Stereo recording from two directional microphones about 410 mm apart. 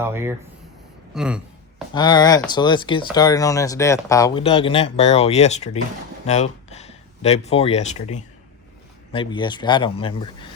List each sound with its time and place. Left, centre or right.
0.0 s speech: centre
1.9 s speech: centre